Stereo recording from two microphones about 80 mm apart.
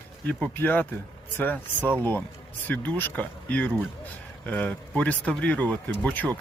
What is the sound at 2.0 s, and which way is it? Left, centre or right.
Speech, left.